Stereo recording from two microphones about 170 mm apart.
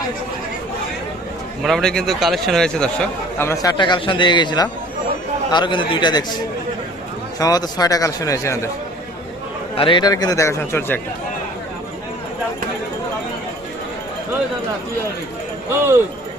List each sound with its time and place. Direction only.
1.6 s a man's voice: 5° left (ahead or behind); by 6.2 s 25° left (ahead or behind)
7.3 s a man's voice: 20° left (ahead or behind)
9.7 s a man's voice: 30° left (ahead or behind); by 11.0 s 10° left (ahead or behind)
15.7 s speech: 15° right (ahead or behind)